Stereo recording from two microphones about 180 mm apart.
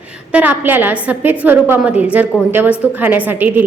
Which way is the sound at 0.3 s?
10° right (ahead or behind).